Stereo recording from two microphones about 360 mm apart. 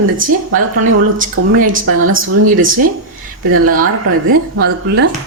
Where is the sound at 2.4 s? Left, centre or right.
Right.